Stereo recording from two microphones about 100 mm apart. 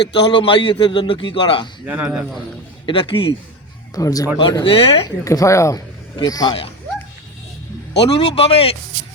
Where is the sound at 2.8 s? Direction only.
55° left (ahead or behind).